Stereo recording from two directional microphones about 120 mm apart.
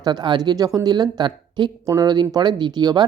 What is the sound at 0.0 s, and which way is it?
Speech, 35° right (ahead or behind).